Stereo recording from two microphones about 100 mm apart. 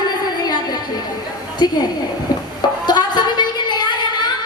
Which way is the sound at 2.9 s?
45° left (ahead or behind).